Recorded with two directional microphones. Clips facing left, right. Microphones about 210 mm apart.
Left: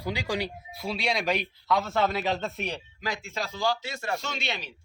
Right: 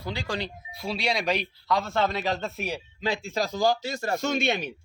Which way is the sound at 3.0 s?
30° right (ahead or behind).